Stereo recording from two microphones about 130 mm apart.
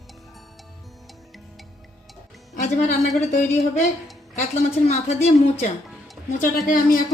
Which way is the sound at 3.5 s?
60° left (ahead or behind).